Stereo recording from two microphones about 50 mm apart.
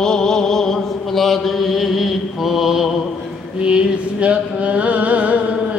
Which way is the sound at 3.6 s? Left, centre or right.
Centre.